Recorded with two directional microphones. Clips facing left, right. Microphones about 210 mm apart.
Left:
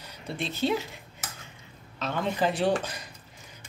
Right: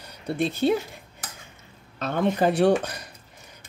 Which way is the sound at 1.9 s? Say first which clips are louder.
Right 5 dB; 55° right (ahead or behind).